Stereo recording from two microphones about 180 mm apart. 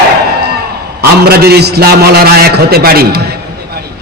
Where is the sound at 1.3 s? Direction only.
60° right (ahead or behind).